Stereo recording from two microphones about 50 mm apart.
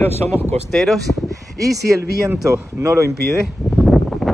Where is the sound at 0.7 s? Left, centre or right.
Centre.